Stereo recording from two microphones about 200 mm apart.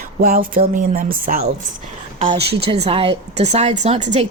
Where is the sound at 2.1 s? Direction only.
35° right (ahead or behind).